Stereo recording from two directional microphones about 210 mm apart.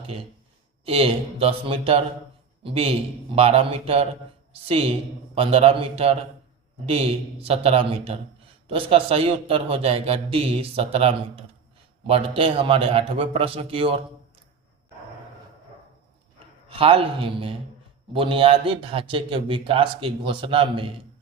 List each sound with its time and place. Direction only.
0.9 s a man's voice: 25° right (ahead or behind)
16.6 s a man's voice: 25° right (ahead or behind)